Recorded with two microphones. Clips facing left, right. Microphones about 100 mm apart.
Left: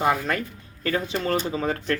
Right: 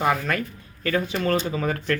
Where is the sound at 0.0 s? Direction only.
25° left (ahead or behind).